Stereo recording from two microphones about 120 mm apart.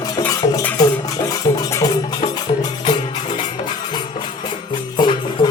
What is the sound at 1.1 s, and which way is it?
Music, 30° left (ahead or behind).